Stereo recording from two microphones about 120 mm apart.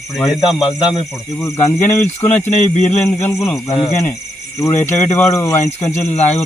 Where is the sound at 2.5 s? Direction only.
80° left.